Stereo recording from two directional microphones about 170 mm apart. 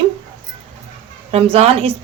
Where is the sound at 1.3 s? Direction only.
35° right (ahead or behind).